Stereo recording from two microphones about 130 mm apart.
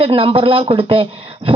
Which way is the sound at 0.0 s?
45° right (ahead or behind).